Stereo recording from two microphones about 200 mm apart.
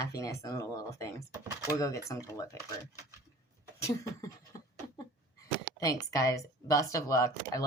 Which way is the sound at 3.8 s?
15° left (ahead or behind).